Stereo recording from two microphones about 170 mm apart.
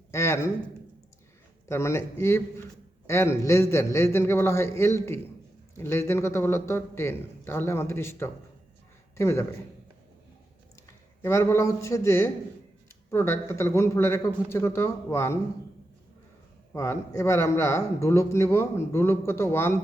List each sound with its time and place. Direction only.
0.1 s a sound: 15° left (ahead or behind)
1.6 s a man's voice: 15° left (ahead or behind)
10.8 s a man's voice: 20° left (ahead or behind)
16.7 s a man's voice: 20° left (ahead or behind)